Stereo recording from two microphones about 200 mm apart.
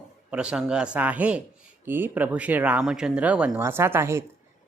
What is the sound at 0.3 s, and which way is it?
Speech, 5° right (ahead or behind).